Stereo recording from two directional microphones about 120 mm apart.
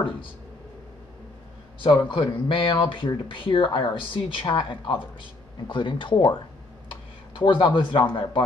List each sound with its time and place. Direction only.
1.8 s speech: 40° left (ahead or behind)